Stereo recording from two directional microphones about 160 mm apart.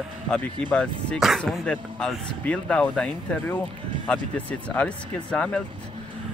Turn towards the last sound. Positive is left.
turn(degrees=5)  # may be behind; listen again after turning